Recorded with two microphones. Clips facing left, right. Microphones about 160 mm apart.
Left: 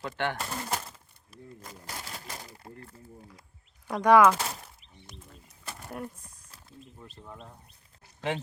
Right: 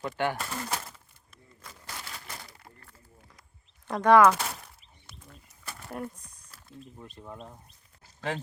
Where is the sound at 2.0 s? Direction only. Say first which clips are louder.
Left 1 dB; 40° left (ahead or behind).